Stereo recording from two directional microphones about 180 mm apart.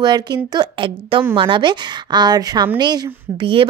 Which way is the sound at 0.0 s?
25° right (ahead or behind).